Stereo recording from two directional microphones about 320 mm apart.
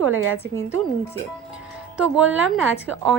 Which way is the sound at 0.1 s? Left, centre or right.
Right.